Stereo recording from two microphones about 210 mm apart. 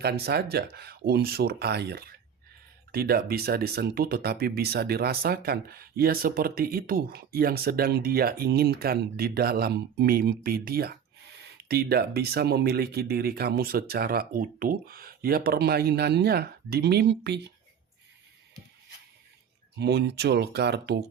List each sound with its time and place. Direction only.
0.0 s speech: 50° right (ahead or behind)
19.8 s speech: 50° right (ahead or behind)